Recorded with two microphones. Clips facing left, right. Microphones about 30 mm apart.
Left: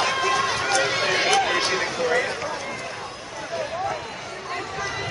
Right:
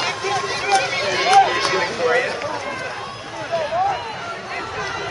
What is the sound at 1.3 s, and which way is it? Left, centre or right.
Run, centre.